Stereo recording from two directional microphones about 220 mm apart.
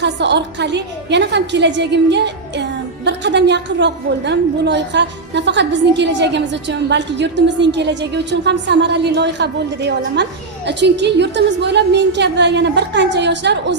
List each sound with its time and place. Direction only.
0.0 s a woman's voice: 50° right (ahead or behind)